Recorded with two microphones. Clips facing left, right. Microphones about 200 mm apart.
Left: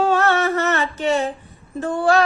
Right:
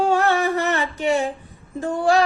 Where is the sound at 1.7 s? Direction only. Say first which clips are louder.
Left 1 dB; 15° right (ahead or behind).